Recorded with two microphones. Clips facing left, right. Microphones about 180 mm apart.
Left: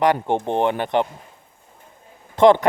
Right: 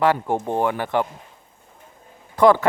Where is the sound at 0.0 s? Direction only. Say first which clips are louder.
Left 1 dB; 20° left (ahead or behind).